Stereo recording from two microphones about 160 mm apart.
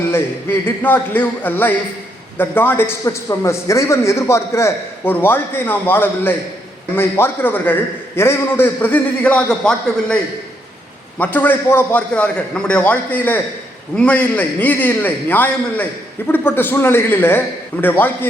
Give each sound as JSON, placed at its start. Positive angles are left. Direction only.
{"t": 0.1, "sound": "a man's voice", "side_deg": 15}
{"t": 11.2, "sound": "a man's voice", "side_deg": 10}